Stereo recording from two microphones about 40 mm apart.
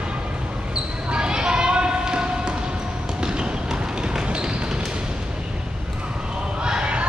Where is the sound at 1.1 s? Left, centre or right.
Right.